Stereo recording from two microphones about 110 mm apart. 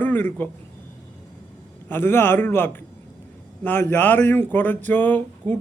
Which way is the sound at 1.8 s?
20° left (ahead or behind).